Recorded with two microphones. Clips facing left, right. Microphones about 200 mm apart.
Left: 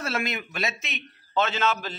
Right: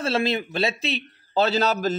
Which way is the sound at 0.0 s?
30° right (ahead or behind).